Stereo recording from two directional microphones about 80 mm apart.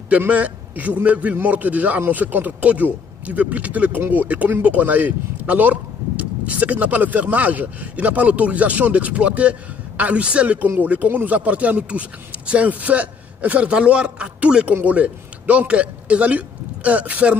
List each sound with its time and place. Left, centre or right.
0.3 s a man's voice: centre